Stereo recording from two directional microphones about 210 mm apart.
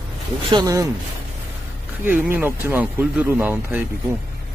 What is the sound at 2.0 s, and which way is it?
Speech, 10° right (ahead or behind).